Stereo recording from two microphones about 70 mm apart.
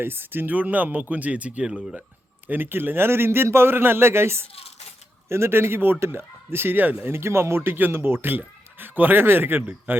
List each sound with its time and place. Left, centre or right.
0.0 s speech: right; by 2.0 s centre
2.5 s speech: right